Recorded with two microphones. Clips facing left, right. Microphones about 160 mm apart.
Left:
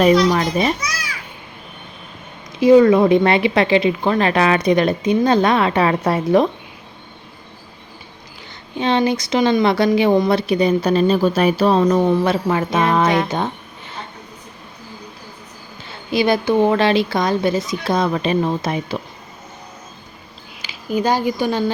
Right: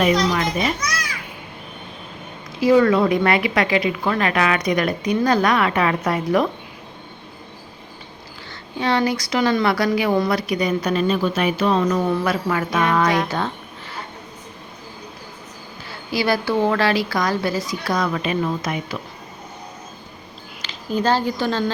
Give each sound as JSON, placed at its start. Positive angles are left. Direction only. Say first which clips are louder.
{"t": 0.0, "sound": "a child's voice", "louder": "left 5 dB", "side_deg": 35}
{"t": 2.6, "sound": "speech", "louder": "left 5 dB", "side_deg": 20}
{"t": 8.8, "sound": "speech", "louder": "left 3 dB", "side_deg": 20}
{"t": 15.9, "sound": "speech", "louder": "left 4 dB", "side_deg": 20}
{"t": 20.6, "sound": "speech", "louder": "left 2 dB", "side_deg": 10}